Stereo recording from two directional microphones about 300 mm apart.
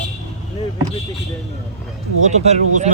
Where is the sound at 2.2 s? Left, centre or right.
Right.